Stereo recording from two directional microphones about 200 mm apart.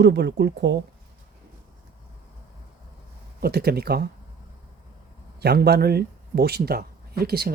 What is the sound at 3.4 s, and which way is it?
Speech, 50° right (ahead or behind).